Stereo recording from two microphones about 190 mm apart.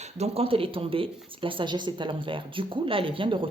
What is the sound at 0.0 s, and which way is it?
Speech, 35° right (ahead or behind).